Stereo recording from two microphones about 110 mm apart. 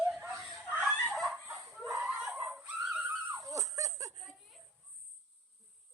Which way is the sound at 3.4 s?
30° right (ahead or behind).